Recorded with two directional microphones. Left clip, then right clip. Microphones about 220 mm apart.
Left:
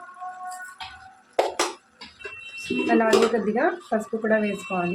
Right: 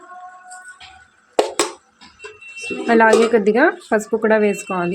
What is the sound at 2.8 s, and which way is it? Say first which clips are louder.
Speech: right 7 dB; 40° right (ahead or behind).